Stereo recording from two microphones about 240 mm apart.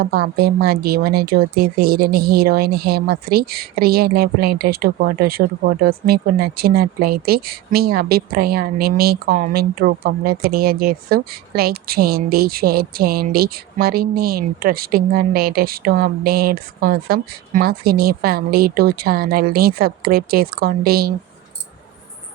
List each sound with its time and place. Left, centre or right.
0.0 s speech: right